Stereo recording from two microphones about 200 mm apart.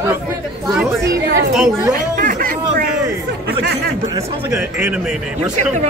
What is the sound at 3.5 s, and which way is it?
Speech, 55° right (ahead or behind).